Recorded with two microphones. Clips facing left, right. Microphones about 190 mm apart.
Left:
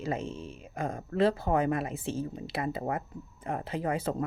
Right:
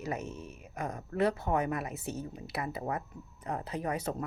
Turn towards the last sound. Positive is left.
turn(degrees=30)  # may be behind; listen again after turning